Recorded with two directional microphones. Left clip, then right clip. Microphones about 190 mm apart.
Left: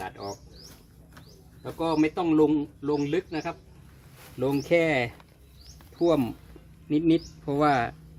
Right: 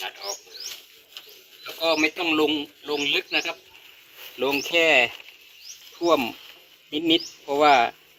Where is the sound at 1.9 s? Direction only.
10° right (ahead or behind).